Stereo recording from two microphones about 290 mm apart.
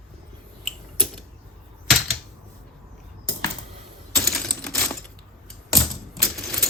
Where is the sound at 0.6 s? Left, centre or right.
Centre.